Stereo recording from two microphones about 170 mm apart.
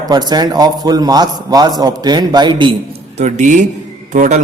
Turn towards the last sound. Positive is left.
turn(degrees=-45)  # may be behind; listen again after turning